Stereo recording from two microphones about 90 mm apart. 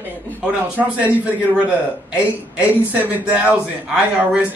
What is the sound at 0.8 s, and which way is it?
Speech, 15° right (ahead or behind).